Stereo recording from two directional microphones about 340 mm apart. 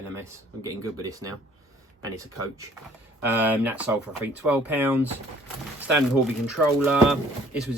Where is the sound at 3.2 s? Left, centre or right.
Centre.